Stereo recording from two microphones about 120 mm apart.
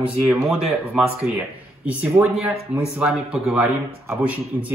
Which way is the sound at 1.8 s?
10° right (ahead or behind).